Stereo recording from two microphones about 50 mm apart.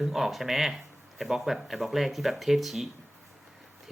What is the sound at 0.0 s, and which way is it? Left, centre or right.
Speech, centre.